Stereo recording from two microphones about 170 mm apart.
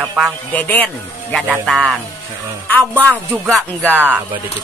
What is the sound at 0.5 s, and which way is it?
Speech, 10° left (ahead or behind).